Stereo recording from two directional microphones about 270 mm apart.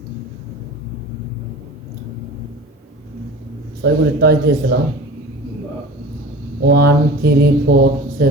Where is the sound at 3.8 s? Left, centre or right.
Right.